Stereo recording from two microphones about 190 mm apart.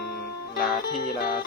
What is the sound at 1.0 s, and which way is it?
Music, 50° left (ahead or behind).